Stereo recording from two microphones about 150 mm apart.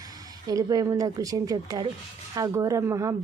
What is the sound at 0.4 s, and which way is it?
A woman's voice, 25° right (ahead or behind).